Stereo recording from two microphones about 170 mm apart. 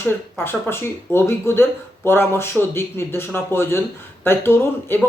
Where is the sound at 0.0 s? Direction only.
15° left (ahead or behind).